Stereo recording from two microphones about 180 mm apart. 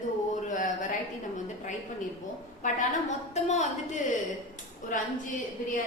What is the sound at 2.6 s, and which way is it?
A woman's voice, 40° left (ahead or behind).